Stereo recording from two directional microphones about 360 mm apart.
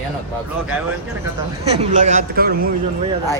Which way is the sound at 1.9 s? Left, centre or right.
Centre.